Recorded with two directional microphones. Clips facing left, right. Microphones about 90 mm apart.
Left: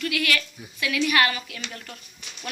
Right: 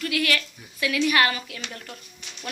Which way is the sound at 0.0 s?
30° right (ahead or behind).